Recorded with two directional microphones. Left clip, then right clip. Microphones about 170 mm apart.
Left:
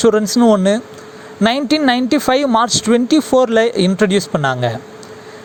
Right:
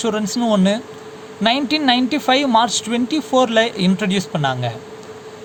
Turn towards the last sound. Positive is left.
turn(degrees=45)  # may be behind; listen again after turning